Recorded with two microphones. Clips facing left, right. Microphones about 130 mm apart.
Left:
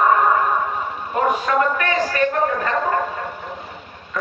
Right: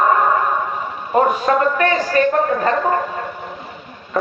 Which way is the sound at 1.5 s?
35° right (ahead or behind).